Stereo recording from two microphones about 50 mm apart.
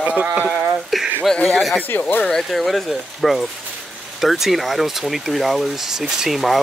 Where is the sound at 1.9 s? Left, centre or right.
Left.